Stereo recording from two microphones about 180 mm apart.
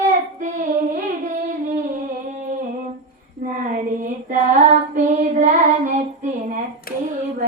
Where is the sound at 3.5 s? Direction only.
50° right (ahead or behind).